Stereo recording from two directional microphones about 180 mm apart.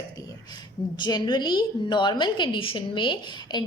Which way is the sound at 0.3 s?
25° left (ahead or behind).